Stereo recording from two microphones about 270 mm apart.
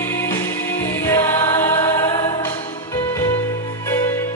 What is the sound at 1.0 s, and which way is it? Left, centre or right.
Choir, centre.